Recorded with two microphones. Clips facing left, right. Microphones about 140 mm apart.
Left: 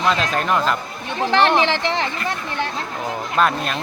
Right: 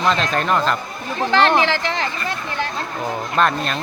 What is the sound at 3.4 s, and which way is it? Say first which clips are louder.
Speech: even; 5° left (ahead or behind).